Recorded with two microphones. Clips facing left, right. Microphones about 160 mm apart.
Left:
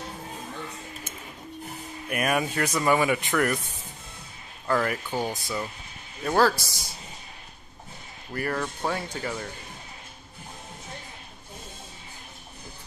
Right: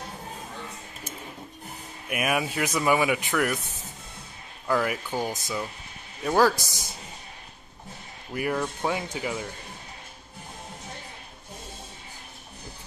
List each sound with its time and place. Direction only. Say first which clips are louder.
2.0 s speech: left 1 dB; 5° right (ahead or behind)
4.6 s speech: even; 5° right (ahead or behind)
8.3 s speech: right 2 dB; 10° right (ahead or behind)